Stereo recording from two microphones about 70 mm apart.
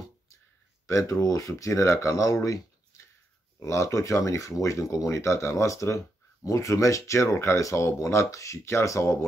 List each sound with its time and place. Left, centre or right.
0.8 s speech: left